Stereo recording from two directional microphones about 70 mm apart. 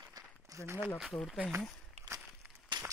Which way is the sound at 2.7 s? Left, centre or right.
Right.